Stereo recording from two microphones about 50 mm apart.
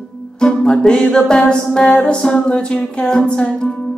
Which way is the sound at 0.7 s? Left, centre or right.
Centre.